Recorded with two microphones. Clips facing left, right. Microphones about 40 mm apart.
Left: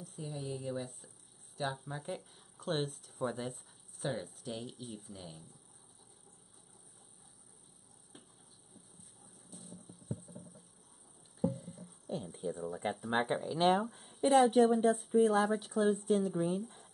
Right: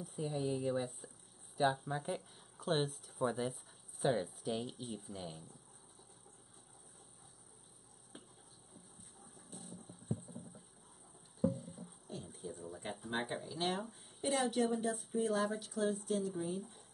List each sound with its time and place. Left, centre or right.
0.0 s speech: centre
8.1 s a sound: centre
12.4 s speech: left
12.6 s speech: left
13.1 s speech: left
13.9 s a sound: left
14.5 s speech: left
15.4 s speech: left